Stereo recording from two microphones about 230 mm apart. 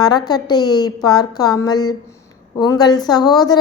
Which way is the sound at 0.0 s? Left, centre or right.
Centre.